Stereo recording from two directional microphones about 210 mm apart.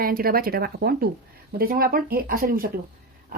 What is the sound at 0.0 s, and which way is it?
A woman's voice, 45° right (ahead or behind).